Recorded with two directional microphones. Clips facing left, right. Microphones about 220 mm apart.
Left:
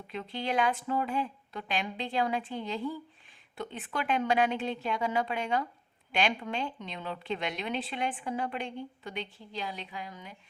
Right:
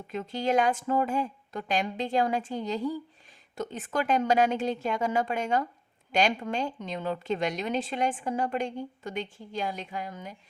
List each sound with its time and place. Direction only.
0.1 s a woman's voice: 45° right (ahead or behind)